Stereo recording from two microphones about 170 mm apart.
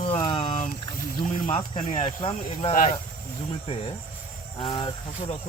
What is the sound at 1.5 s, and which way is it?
Speech, 40° left (ahead or behind).